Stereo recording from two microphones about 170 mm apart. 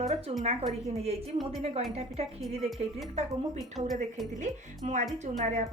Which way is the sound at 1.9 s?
35° right (ahead or behind).